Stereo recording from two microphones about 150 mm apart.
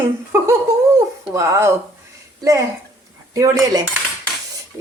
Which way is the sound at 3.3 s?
20° right (ahead or behind).